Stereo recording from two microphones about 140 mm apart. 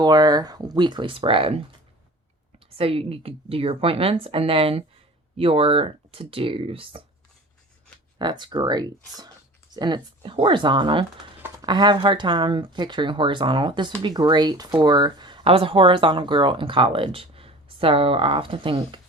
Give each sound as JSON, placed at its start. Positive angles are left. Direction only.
{"t": 0.0, "sound": "speech", "side_deg": -30}
{"t": 2.6, "sound": "a woman's voice", "side_deg": -45}
{"t": 8.2, "sound": "speech", "side_deg": -35}